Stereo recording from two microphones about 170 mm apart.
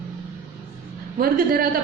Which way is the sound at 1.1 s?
60° right (ahead or behind).